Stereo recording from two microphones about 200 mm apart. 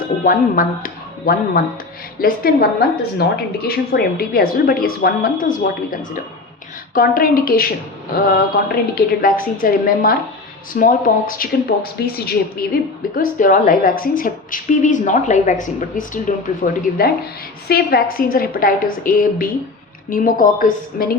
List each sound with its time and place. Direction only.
0.3 s a woman's voice: 45° left (ahead or behind)
8.7 s a woman's voice: 45° left (ahead or behind)